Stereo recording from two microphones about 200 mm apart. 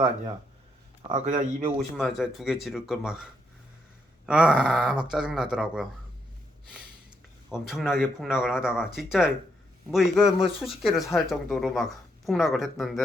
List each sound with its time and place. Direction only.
1.0 s speech: 35° right (ahead or behind)
1.8 s speech: centre (ahead or behind)
7.5 s speech: centre (ahead or behind)